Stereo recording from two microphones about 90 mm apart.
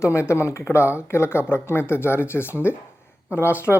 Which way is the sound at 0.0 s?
30° left (ahead or behind).